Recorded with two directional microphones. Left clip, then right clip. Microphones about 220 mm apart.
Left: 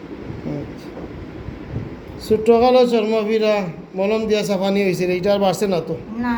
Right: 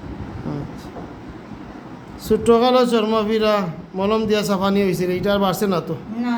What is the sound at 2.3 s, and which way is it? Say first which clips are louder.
A man's voice: left 1 dB; 15° right (ahead or behind).